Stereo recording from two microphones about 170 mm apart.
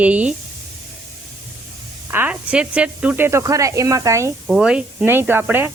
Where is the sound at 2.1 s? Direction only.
10° right (ahead or behind).